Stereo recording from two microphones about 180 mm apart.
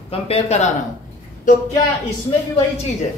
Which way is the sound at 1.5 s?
45° left (ahead or behind).